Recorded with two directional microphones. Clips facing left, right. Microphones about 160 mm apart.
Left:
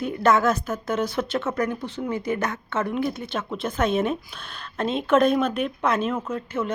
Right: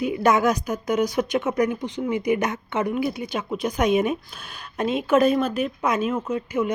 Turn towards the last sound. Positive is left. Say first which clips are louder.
# right 3 dB
turn(degrees=-15)  # may be behind; listen again after turning